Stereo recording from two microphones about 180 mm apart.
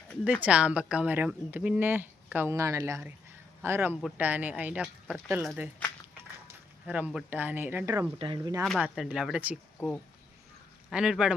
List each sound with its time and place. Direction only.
0.4 s speech: 5° right (ahead or behind)
8.2 s speech: 25° right (ahead or behind)
8.8 s speech: 5° right (ahead or behind)
10.8 s speech: 5° right (ahead or behind)